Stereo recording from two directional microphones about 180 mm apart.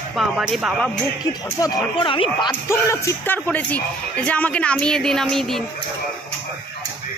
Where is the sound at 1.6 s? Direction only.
30° left (ahead or behind).